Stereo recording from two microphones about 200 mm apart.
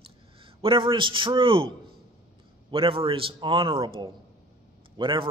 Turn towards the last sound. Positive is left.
turn(degrees=-25)  # may be behind; listen again after turning